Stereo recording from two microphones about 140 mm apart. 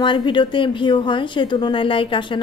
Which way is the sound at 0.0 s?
35° left (ahead or behind).